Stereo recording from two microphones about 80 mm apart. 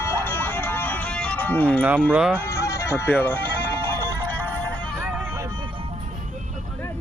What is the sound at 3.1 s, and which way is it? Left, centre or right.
Speech, left.